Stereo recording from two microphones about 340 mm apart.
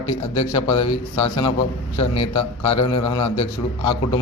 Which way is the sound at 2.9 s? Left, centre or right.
Centre.